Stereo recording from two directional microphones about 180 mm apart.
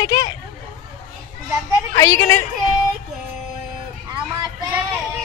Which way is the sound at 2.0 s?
15° left (ahead or behind).